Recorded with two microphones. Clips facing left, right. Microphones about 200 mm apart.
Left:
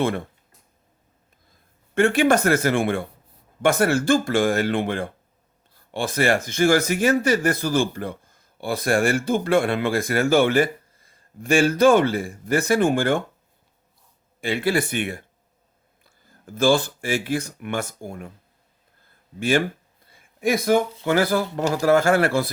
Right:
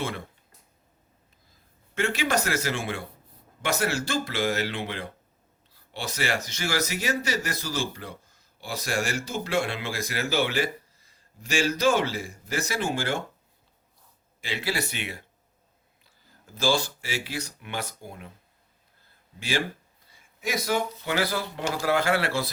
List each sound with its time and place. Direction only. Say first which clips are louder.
2.0 s speech: left 9 dB; 55° left (ahead or behind)
14.4 s speech: left 8 dB; 55° left (ahead or behind)
19.4 s speech: left 8 dB; 50° left (ahead or behind)